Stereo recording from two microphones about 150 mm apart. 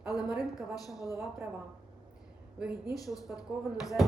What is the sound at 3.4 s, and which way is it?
Speech, 5° right (ahead or behind).